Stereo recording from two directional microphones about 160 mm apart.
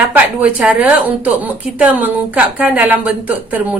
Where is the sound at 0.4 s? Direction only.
5° right (ahead or behind).